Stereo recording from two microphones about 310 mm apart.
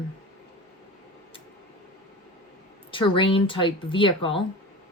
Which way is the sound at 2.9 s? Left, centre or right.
Centre.